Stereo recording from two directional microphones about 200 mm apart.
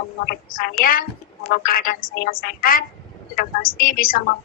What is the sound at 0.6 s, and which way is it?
Speech, 45° left (ahead or behind).